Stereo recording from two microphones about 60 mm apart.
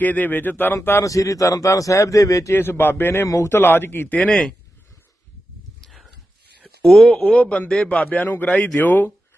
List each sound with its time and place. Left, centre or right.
0.0 s speech: left
1.0 s speech: left
2.5 s speech: left
3.2 s a man's voice: left
3.5 s speech: left
4.2 s speech: centre
5.8 s a sound: centre
6.8 s speech: centre
7.3 s speech: left